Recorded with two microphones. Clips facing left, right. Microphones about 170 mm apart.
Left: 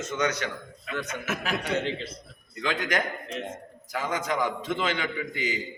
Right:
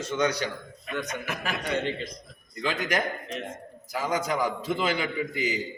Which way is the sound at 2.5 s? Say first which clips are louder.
Even; 10° right (ahead or behind).